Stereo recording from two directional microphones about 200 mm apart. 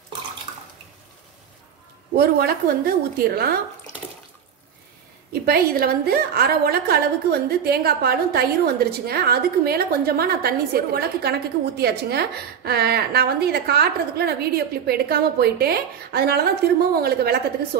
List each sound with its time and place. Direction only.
2.1 s a woman's voice: 50° right (ahead or behind)
5.3 s a woman's voice: 50° right (ahead or behind)